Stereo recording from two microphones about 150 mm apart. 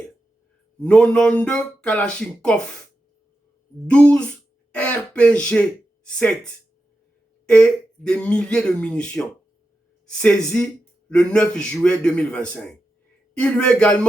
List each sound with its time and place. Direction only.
0.8 s speech: 5° left (ahead or behind)
3.8 s speech: 10° left (ahead or behind)